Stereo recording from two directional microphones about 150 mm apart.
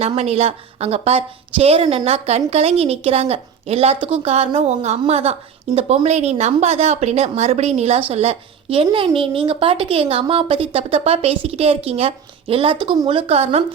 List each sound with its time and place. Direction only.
0.0 s a woman's voice: 45° right (ahead or behind)